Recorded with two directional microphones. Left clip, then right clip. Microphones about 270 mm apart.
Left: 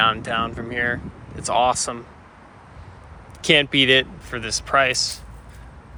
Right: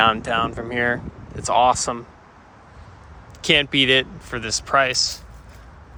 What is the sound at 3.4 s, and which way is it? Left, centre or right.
Speech, centre.